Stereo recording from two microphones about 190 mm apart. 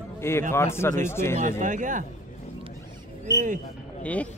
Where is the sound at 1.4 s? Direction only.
40° right (ahead or behind).